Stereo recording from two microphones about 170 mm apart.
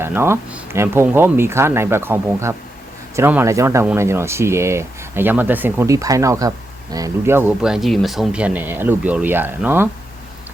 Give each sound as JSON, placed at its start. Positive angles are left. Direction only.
{"t": 0.0, "sound": "speech", "side_deg": -15}